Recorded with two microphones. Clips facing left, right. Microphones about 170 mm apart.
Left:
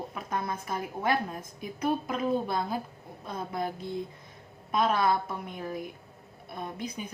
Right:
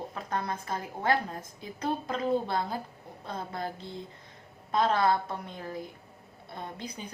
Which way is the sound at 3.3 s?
15° left (ahead or behind).